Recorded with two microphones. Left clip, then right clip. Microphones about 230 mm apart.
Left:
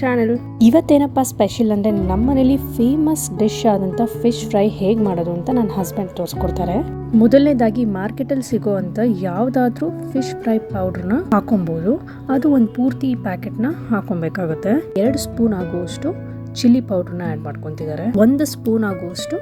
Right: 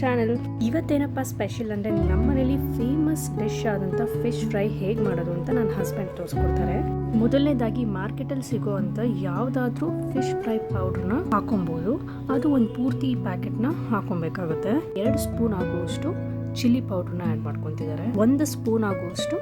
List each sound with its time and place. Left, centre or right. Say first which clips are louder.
0.0 s speech: left 6 dB; centre
0.6 s music: left 14 dB; left
2.0 s speech: left 6 dB; centre
2.3 s music: left 9 dB; left
5.0 s speech: left 6 dB; centre
6.5 s music: left 5 dB; left
7.3 s speech: left 10 dB; centre
15.5 s speech: left 4 dB; centre
16.6 s speech: left 9 dB; centre